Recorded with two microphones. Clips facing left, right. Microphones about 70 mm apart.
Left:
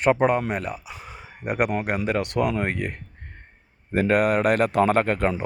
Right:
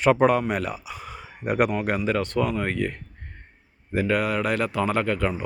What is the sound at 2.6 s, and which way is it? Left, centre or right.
Speech, centre.